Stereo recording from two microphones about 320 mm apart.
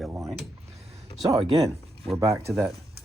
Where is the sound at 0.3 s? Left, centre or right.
Centre.